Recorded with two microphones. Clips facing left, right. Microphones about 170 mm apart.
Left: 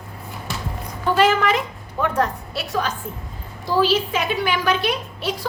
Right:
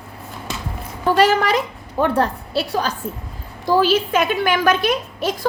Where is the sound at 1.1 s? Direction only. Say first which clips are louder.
Right 2 dB; 40° right (ahead or behind).